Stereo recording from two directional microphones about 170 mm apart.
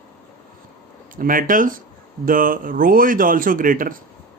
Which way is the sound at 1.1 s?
55° right (ahead or behind).